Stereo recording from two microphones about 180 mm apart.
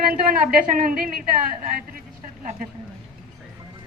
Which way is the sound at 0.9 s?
50° right (ahead or behind).